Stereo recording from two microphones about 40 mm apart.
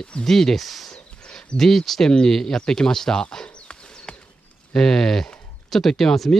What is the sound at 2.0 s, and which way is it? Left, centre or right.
Speech, centre.